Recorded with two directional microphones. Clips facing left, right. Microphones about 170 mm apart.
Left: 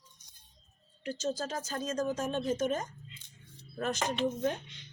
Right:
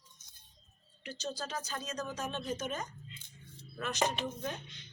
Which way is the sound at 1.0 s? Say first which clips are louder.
Left 6 dB; 45° left (ahead or behind).